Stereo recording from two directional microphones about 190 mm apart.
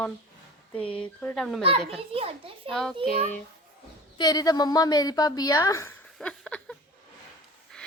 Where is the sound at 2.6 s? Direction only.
5° left (ahead or behind).